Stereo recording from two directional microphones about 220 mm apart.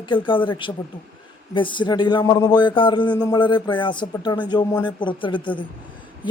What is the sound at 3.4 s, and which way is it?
Speech, 20° left (ahead or behind).